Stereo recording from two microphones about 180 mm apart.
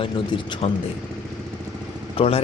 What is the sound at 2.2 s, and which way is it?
Speech, 30° left (ahead or behind).